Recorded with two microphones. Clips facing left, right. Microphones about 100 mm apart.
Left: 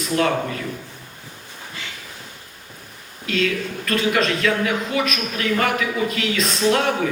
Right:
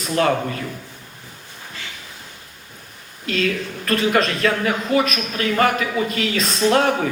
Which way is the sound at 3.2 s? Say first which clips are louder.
Even; 40° right (ahead or behind).